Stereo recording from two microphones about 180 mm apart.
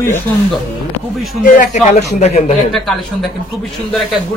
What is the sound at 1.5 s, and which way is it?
Speech, 45° left (ahead or behind).